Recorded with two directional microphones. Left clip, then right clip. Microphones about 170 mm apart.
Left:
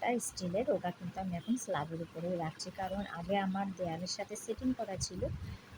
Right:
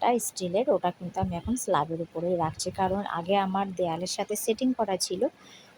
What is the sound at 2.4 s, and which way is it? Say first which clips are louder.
A woman's voice: right 12 dB; 30° right (ahead or behind).